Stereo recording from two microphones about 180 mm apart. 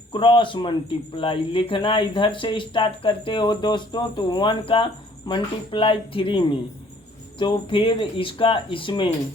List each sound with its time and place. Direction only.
0.1 s speech: 25° left (ahead or behind)